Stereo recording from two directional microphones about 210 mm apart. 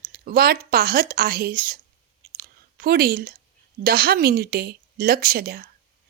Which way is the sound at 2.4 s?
45° right (ahead or behind).